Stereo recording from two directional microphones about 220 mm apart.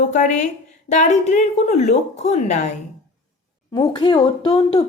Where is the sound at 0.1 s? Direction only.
35° left (ahead or behind).